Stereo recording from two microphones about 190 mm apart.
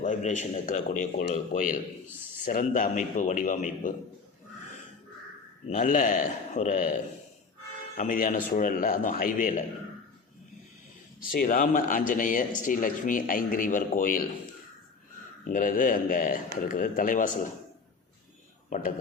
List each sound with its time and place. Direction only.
0.0 s a man's voice: 40° left (ahead or behind)
5.6 s speech: 40° left (ahead or behind)
11.3 s speech: 45° left (ahead or behind)
15.4 s speech: 45° left (ahead or behind)
18.7 s speech: 45° left (ahead or behind)